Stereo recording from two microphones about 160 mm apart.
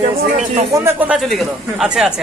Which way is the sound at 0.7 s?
10° right (ahead or behind).